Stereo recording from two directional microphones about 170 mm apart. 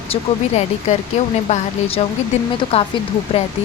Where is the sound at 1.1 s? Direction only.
40° left (ahead or behind).